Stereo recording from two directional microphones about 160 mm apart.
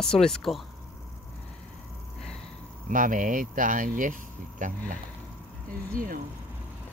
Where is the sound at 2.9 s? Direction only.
55° right (ahead or behind).